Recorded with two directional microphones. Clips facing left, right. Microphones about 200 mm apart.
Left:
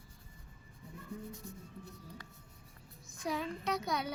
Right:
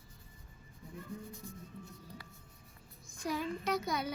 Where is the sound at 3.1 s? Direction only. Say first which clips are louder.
Right 1 dB; centre (ahead or behind).